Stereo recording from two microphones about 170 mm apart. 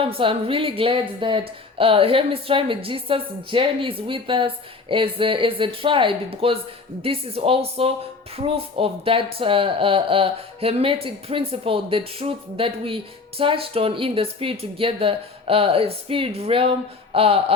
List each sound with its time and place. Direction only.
0.2 s speech: 30° right (ahead or behind)